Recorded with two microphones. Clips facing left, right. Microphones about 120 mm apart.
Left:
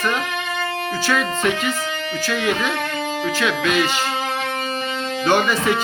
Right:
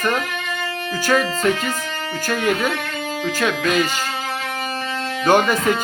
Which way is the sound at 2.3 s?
45° right (ahead or behind).